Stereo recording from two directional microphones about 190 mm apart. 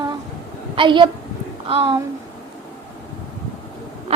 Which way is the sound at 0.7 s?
25° right (ahead or behind).